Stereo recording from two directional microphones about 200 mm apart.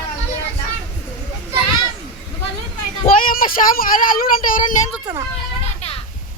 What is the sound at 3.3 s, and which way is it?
Speech, 45° left (ahead or behind).